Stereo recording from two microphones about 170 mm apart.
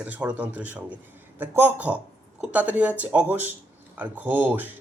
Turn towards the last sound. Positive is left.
turn(degrees=-10)  # may be behind; listen again after turning